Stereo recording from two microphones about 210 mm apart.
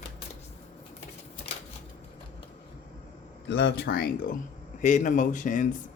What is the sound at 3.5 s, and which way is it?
Speech, 55° left (ahead or behind).